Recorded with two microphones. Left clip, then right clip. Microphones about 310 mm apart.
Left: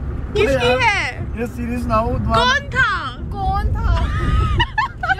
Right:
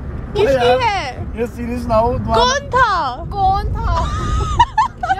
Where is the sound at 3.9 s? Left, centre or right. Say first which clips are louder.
Right 4 dB; centre.